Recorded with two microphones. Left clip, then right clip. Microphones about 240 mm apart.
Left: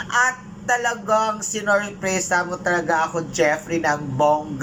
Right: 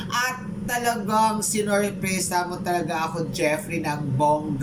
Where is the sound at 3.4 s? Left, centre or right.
Centre.